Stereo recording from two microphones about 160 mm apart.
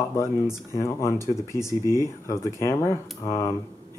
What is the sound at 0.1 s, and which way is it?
Speech, 20° left (ahead or behind).